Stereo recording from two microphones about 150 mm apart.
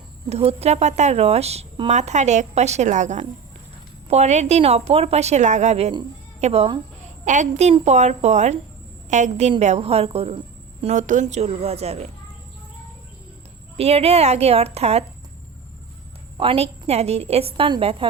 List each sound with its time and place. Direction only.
0.3 s a woman's voice: 45° right (ahead or behind)
1.9 s a woman's voice: 50° right (ahead or behind)
7.3 s a woman's voice: 50° right (ahead or behind)
13.7 s a woman's voice: 45° right (ahead or behind)
16.4 s a woman's voice: 40° right (ahead or behind)